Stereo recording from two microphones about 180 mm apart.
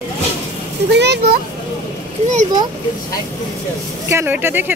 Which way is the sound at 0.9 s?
70° right (ahead or behind).